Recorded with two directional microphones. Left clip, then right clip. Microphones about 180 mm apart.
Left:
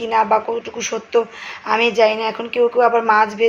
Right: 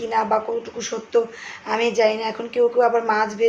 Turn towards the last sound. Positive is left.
turn(degrees=10)  # may be behind; listen again after turning